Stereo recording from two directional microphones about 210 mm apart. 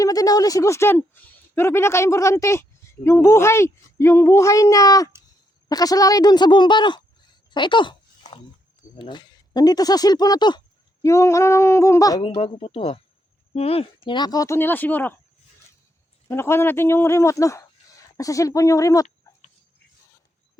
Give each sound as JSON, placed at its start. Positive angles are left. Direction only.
{"t": 0.0, "sound": "speech", "side_deg": 15}
{"t": 9.0, "sound": "speech", "side_deg": 20}
{"t": 16.3, "sound": "speech", "side_deg": 10}